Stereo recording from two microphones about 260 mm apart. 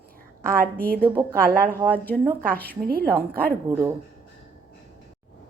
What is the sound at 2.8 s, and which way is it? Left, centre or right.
Speech, right.